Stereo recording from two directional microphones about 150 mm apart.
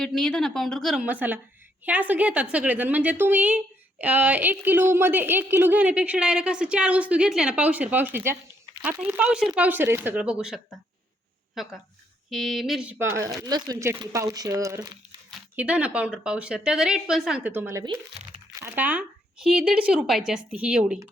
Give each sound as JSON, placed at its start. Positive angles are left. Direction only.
{"t": 0.0, "sound": "speech", "side_deg": 5}
{"t": 1.0, "sound": "a woman's voice", "side_deg": -10}
{"t": 15.5, "sound": "a woman's voice", "side_deg": -10}